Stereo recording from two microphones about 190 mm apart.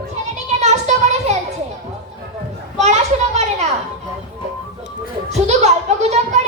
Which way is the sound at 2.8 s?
35° right (ahead or behind).